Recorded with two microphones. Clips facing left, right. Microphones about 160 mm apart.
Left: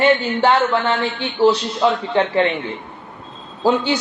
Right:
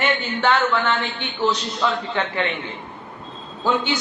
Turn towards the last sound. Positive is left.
turn(degrees=35)  # may be behind; listen again after turning